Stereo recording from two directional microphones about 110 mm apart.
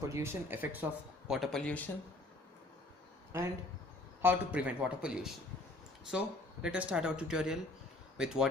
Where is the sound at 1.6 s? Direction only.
15° left (ahead or behind).